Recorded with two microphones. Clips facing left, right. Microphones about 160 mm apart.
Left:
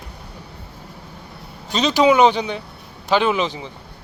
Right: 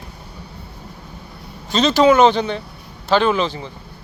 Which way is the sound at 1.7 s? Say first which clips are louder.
Right 2 dB; 15° left (ahead or behind).